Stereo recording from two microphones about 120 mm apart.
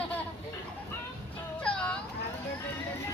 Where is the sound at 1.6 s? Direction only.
10° left (ahead or behind).